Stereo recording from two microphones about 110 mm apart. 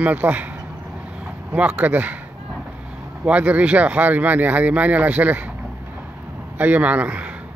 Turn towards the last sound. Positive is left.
turn(degrees=-15)  # may be behind; listen again after turning